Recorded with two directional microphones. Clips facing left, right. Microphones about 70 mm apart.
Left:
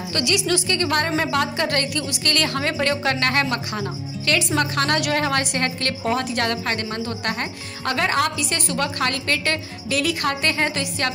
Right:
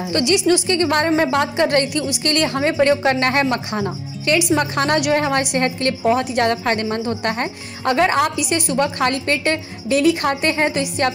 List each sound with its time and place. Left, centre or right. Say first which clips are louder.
0.0 s a woman's voice: right 6 dB; right